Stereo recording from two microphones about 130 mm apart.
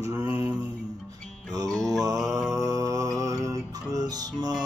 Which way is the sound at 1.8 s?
30° right (ahead or behind).